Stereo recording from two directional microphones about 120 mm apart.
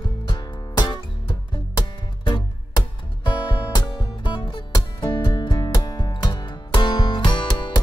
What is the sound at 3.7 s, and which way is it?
Music, 40° left (ahead or behind).